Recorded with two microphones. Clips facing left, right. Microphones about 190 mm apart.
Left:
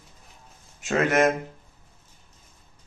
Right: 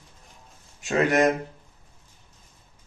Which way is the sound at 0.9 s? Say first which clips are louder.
Even; 15° right (ahead or behind).